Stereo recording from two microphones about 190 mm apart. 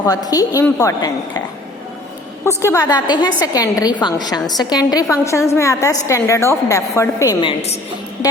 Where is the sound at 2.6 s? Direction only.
15° left (ahead or behind).